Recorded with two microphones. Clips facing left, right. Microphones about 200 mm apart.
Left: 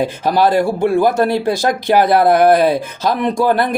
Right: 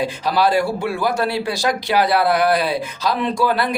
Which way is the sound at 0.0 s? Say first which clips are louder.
Left 4 dB; 50° left (ahead or behind).